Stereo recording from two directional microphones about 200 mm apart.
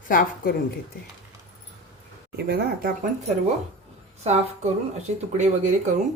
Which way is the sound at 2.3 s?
55° right (ahead or behind).